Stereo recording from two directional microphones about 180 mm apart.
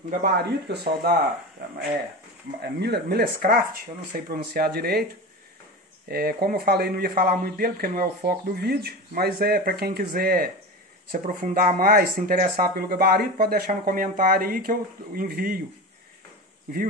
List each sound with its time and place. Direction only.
0.2 s speech: 60° right (ahead or behind)
2.6 s speech: 65° right (ahead or behind)
6.0 s speech: 60° right (ahead or behind)